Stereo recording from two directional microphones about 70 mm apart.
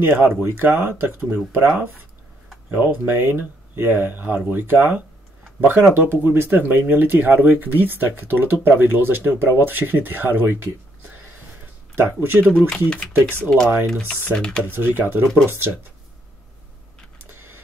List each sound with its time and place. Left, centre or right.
0.0 s speech: right
12.0 s speech: right
12.5 s speech: centre
13.8 s speech: centre
14.6 s speech: right
17.3 s printer: right